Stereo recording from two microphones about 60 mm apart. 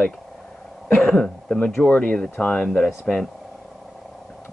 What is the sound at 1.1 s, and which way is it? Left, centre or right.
Speech, centre.